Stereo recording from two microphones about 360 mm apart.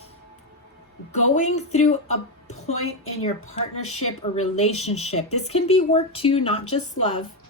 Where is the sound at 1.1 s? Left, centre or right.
Centre.